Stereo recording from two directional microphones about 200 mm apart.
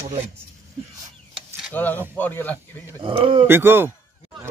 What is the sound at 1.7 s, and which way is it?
Speech, 10° left (ahead or behind).